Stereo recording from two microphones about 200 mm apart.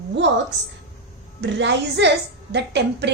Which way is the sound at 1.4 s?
60° right (ahead or behind).